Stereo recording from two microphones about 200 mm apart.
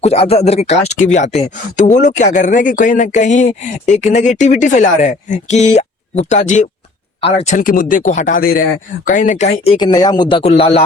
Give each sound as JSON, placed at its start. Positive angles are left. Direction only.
{"t": 0.0, "sound": "speech", "side_deg": 30}
{"t": 9.7, "sound": "speech", "side_deg": 20}